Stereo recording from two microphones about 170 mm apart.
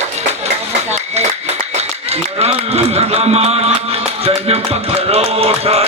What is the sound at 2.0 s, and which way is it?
Speech, 35° right (ahead or behind).